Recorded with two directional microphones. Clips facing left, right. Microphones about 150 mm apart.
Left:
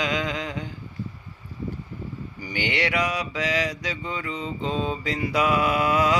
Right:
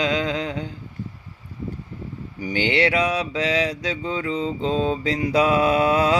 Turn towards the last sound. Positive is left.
turn(degrees=-30)  # may be behind; listen again after turning